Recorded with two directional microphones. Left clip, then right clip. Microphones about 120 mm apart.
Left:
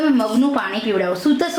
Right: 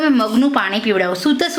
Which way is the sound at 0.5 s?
45° right (ahead or behind).